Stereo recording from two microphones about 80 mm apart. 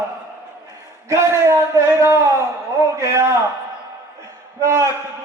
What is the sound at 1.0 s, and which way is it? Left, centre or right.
A man's voice, right.